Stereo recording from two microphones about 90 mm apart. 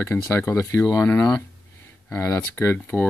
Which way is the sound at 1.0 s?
20° left (ahead or behind).